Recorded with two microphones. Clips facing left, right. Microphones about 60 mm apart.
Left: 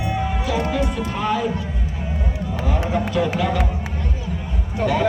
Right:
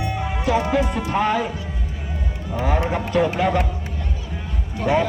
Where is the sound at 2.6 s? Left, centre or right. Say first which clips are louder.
Right 1 dB; right.